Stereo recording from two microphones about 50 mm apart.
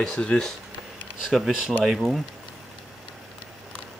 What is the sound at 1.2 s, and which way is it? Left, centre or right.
Speech, centre.